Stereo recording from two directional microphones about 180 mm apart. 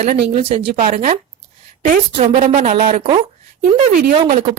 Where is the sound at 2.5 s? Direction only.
50° right (ahead or behind).